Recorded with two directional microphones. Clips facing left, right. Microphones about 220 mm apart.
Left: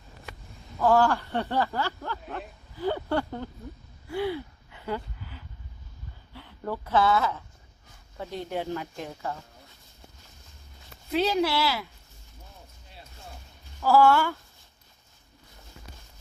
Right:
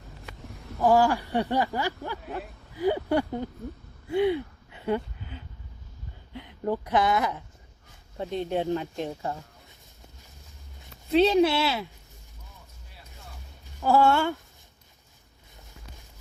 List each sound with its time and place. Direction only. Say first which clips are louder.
0.8 s a sound: right 1 dB; 15° right (ahead or behind)
6.3 s speech: right 5 dB; 15° right (ahead or behind)
11.1 s speech: right 5 dB; 25° right (ahead or behind)
13.7 s speech: left 1 dB; 20° right (ahead or behind)